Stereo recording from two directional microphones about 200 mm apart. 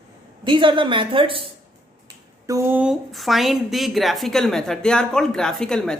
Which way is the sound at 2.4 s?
15° right (ahead or behind).